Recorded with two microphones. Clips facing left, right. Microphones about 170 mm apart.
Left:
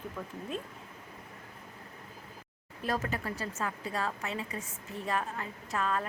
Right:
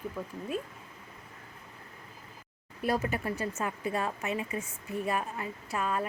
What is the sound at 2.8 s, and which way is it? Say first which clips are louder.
Speech: right 3 dB; 10° right (ahead or behind).